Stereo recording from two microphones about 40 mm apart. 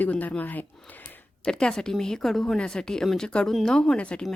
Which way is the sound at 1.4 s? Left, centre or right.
Left.